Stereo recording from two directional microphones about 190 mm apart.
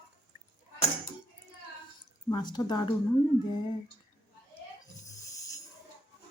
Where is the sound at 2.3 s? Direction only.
20° left (ahead or behind).